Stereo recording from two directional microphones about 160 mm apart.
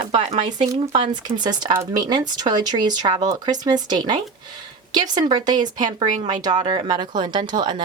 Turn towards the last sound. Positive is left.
turn(degrees=-25)  # may be behind; listen again after turning